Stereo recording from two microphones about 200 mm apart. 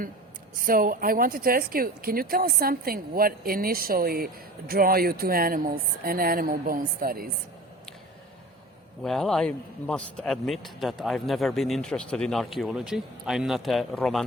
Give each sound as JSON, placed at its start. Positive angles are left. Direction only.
{"t": 0.7, "sound": "speech", "side_deg": -45}
{"t": 9.0, "sound": "a man's voice", "side_deg": 0}